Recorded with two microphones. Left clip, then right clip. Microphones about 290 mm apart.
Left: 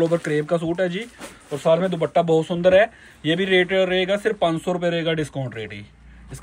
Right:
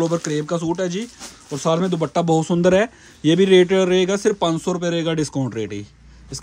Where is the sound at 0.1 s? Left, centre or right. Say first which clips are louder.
Left 1 dB; centre.